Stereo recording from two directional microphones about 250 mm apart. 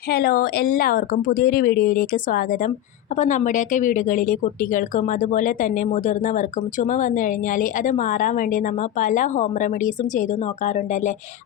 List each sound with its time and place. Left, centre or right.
0.1 s speech: left